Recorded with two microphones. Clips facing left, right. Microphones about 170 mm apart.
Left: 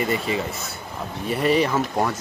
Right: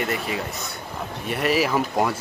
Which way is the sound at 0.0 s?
Centre (ahead or behind).